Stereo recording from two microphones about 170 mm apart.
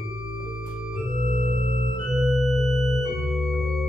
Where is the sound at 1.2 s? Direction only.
35° left (ahead or behind).